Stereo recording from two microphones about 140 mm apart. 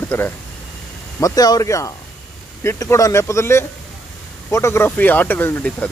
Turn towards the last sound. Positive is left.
turn(degrees=10)  # may be behind; listen again after turning